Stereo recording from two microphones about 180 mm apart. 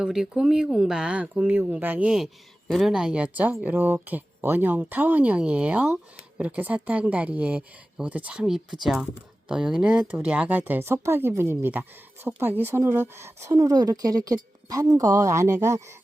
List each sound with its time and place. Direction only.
0.0 s speech: centre (ahead or behind)